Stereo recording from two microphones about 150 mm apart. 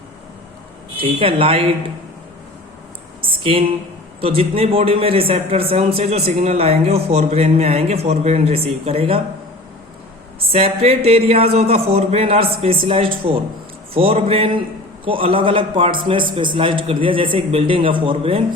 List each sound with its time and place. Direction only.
0.9 s a man's voice: 35° right (ahead or behind)
3.2 s a sound: 35° right (ahead or behind)
4.2 s a man's voice: 40° right (ahead or behind)
10.5 s a man's voice: 40° right (ahead or behind)